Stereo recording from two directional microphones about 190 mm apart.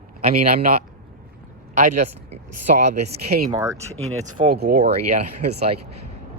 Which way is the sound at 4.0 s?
35° right (ahead or behind).